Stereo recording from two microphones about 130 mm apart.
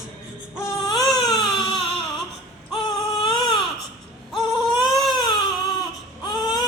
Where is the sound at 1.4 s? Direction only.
5° left (ahead or behind).